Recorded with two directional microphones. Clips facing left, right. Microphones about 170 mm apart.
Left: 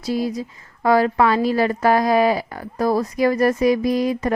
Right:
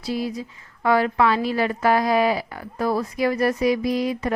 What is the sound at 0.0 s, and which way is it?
A woman's voice, 40° left (ahead or behind).